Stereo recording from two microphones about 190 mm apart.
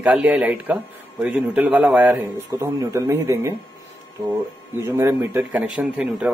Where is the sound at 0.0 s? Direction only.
5° right (ahead or behind).